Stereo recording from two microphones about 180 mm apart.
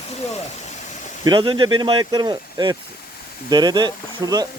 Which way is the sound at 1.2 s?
25° right (ahead or behind).